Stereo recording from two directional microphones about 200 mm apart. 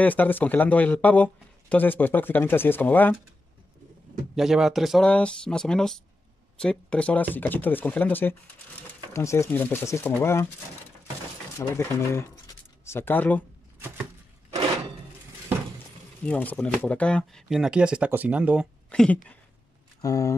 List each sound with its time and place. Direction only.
0.0 s speech: 10° left (ahead or behind)
4.4 s speech: centre (ahead or behind)
11.5 s speech: 15° left (ahead or behind)
16.3 s speech: 5° left (ahead or behind)
18.9 s speech: 5° left (ahead or behind)
20.0 s speech: 15° left (ahead or behind)